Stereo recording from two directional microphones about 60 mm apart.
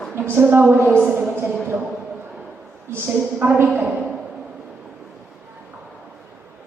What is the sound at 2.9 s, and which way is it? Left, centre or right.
Speech, right.